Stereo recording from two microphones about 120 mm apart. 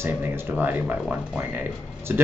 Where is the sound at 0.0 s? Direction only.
20° right (ahead or behind).